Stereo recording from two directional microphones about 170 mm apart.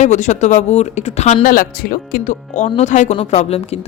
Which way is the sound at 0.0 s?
45° left (ahead or behind).